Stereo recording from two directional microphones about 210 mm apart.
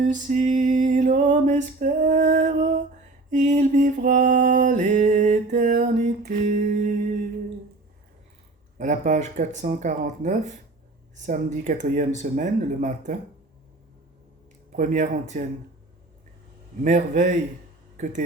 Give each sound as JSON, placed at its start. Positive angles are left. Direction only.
{"t": 0.1, "sound": "mantra", "side_deg": -35}
{"t": 8.8, "sound": "mantra", "side_deg": -35}
{"t": 14.8, "sound": "mantra", "side_deg": -35}
{"t": 16.8, "sound": "mantra", "side_deg": -35}
{"t": 17.9, "sound": "a sound", "side_deg": -35}